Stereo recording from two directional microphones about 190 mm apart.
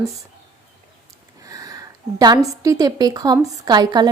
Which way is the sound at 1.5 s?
20° right (ahead or behind).